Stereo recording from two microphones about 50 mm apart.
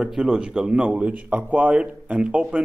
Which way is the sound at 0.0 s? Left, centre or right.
Centre.